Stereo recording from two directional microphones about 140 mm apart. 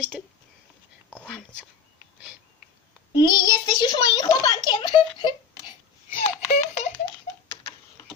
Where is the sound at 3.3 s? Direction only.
35° left (ahead or behind).